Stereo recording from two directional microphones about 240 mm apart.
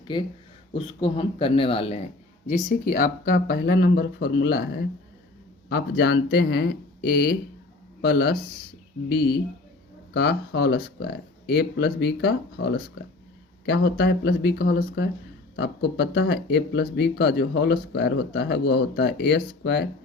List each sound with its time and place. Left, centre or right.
0.7 s speech: left
2.5 s speech: left
13.7 s speech: left